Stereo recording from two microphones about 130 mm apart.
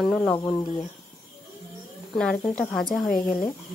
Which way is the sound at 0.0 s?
Centre (ahead or behind).